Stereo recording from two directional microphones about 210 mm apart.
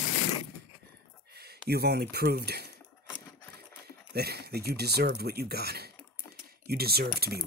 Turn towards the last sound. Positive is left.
turn(degrees=-45)  # may be behind; listen again after turning